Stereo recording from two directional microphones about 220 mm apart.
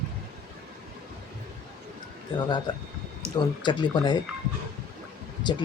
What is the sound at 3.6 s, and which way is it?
Speech, 20° left (ahead or behind).